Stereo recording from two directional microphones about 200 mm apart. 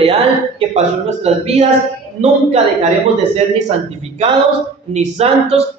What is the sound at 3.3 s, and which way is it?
Speech, 35° right (ahead or behind).